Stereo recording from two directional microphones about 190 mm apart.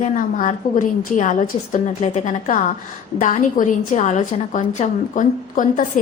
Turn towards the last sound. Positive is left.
turn(degrees=45)  # may be behind; listen again after turning